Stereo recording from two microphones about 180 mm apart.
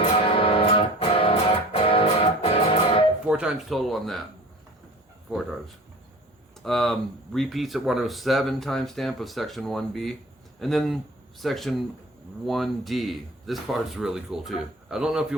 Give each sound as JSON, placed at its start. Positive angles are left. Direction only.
{"t": 0.3, "sound": "music", "side_deg": 30}
{"t": 3.2, "sound": "speech", "side_deg": -5}
{"t": 5.3, "sound": "speech", "side_deg": 0}